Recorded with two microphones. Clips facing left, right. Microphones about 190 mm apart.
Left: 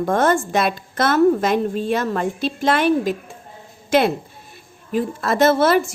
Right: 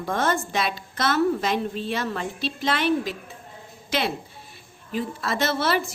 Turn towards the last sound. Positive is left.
turn(degrees=50)  # may be behind; listen again after turning